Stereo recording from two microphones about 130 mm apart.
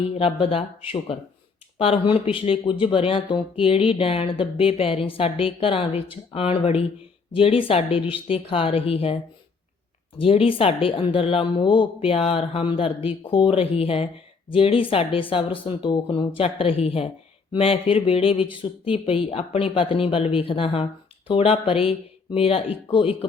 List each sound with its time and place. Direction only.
0.1 s speech: 45° left (ahead or behind)
10.2 s speech: 45° left (ahead or behind)